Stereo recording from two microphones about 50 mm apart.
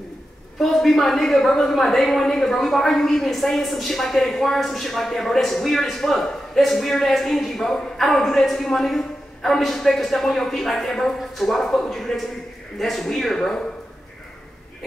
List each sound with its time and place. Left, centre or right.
0.6 s a woman's voice: centre